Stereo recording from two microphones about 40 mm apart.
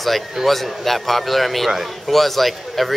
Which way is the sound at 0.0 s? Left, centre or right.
Centre.